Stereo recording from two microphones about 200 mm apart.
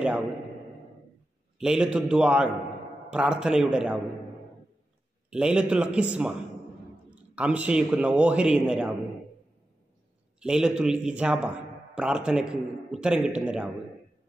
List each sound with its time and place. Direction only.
1.6 s a man's voice: 5° right (ahead or behind)
5.3 s a man's voice: 5° right (ahead or behind)
10.4 s a man's voice: 5° right (ahead or behind)